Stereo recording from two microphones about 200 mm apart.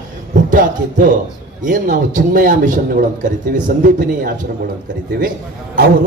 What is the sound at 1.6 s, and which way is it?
A man's voice, 40° right (ahead or behind).